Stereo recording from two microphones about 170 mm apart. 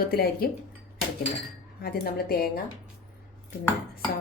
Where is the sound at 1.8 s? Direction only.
65° left (ahead or behind).